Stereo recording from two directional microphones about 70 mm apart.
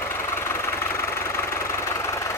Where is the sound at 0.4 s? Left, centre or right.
Left.